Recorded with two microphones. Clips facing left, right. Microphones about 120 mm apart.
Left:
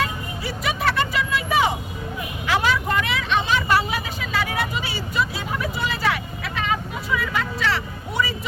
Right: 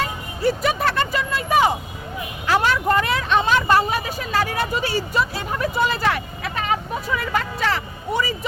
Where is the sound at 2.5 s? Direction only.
40° right (ahead or behind).